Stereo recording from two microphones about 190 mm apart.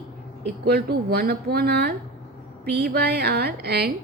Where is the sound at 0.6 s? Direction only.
55° right (ahead or behind).